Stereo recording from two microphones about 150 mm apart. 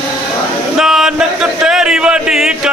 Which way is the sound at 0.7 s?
Centre (ahead or behind).